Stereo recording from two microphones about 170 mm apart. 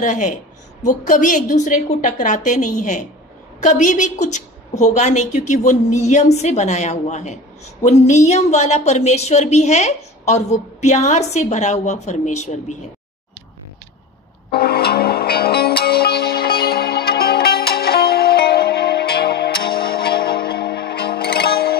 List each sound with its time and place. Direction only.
0.0 s a woman's voice: 50° left (ahead or behind)
14.5 s music: 65° left (ahead or behind)